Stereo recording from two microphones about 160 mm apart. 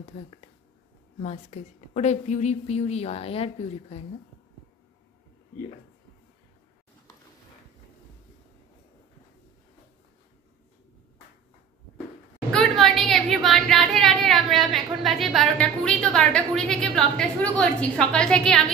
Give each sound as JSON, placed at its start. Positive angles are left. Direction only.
{"t": 0.0, "sound": "a woman's voice", "side_deg": 35}
{"t": 12.5, "sound": "a woman's voice", "side_deg": 0}